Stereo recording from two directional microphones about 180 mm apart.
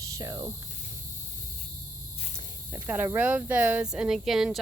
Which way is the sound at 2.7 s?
10° right (ahead or behind).